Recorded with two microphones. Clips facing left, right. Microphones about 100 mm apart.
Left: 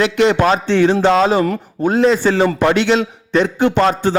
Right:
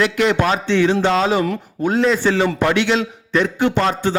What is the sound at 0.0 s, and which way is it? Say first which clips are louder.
A man's voice: left 3 dB; 30° left (ahead or behind).